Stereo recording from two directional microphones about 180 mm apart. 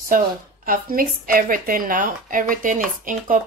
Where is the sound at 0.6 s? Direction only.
50° right (ahead or behind).